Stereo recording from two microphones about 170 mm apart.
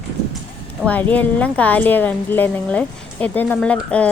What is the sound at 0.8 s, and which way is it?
A woman's voice, 10° left (ahead or behind).